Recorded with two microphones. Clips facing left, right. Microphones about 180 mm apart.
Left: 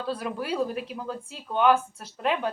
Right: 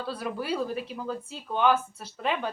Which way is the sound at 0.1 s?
5° right (ahead or behind).